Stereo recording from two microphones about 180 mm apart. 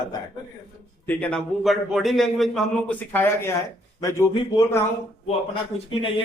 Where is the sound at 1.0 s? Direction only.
5° left (ahead or behind).